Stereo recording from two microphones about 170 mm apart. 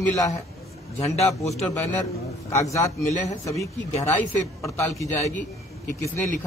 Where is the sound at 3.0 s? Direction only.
45° left (ahead or behind).